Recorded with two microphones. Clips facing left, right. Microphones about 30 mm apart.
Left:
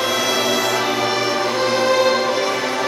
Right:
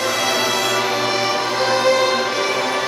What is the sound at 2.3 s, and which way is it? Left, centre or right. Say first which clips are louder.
Music: left 1 dB; right.